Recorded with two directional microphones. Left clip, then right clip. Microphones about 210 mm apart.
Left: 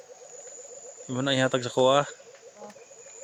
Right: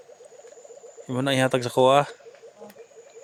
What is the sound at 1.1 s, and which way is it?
Speech, 25° right (ahead or behind).